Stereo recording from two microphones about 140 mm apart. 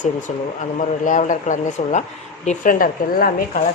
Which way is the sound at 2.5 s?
85° left.